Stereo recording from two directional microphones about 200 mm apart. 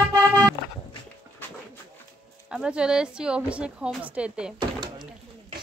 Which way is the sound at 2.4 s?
5° right (ahead or behind).